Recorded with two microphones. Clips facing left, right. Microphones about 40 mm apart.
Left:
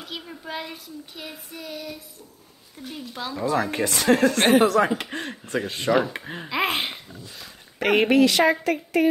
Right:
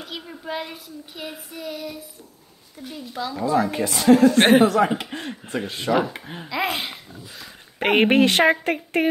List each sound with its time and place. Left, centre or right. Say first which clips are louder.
0.0 s a child's voice: right 2 dB; centre
3.2 s speech: right 4 dB; centre
3.7 s speech: right 6 dB; left
4.4 s a woman's voice: right 3 dB; right
4.7 s speech: right 1 dB; left
5.9 s a child's voice: even; centre
6.1 s speech: left 2 dB; left
6.5 s speech: left 1 dB; left
7.8 s a woman's voice: right 1 dB; right